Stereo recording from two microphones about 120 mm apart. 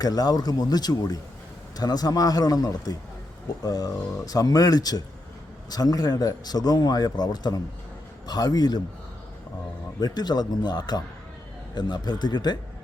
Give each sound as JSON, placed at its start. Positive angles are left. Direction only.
{"t": 0.0, "sound": "a man's voice", "side_deg": 35}
{"t": 10.0, "sound": "a man's voice", "side_deg": 35}